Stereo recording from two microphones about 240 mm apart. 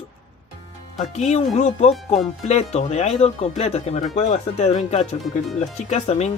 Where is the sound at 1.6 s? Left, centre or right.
Left.